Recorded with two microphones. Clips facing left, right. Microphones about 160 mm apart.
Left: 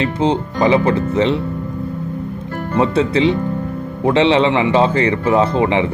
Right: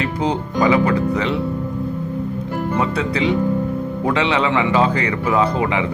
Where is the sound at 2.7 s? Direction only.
30° left (ahead or behind).